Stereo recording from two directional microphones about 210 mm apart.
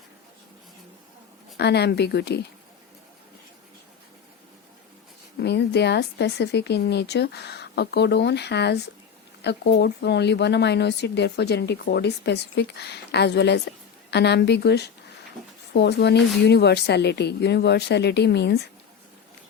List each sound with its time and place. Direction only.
1.5 s speech: 50° left (ahead or behind)
5.4 s speech: 50° left (ahead or behind)